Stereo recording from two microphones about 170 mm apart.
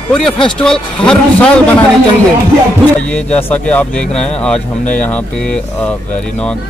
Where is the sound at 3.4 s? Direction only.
10° left (ahead or behind).